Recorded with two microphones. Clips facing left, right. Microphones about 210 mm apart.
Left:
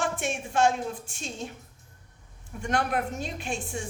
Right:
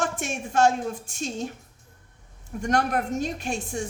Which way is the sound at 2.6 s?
45° right (ahead or behind).